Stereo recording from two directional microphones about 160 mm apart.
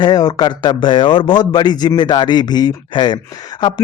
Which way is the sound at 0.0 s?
25° left (ahead or behind).